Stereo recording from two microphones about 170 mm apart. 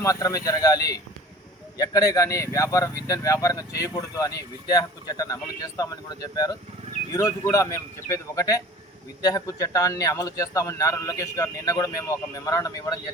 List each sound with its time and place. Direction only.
0.0 s a man's voice: 20° left (ahead or behind)